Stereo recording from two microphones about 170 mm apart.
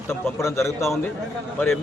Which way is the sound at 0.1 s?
15° left (ahead or behind).